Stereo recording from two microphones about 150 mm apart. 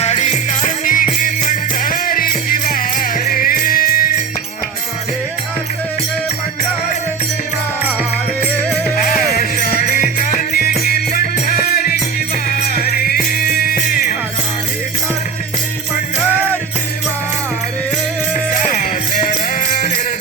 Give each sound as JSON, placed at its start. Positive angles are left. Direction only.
{"t": 0.0, "sound": "music", "side_deg": 50}
{"t": 9.0, "sound": "music", "side_deg": 70}
{"t": 18.5, "sound": "music", "side_deg": 60}